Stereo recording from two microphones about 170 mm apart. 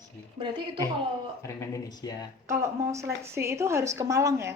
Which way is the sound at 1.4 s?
20° left (ahead or behind).